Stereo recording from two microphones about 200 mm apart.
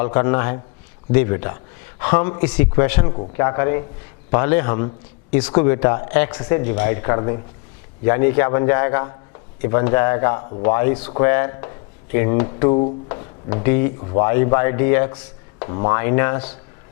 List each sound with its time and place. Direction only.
0.0 s a man's voice: 15° left (ahead or behind)
14.0 s speech: 25° left (ahead or behind)
14.3 s a man's voice: 15° left (ahead or behind)